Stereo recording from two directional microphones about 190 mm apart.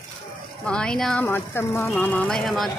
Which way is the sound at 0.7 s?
5° left (ahead or behind).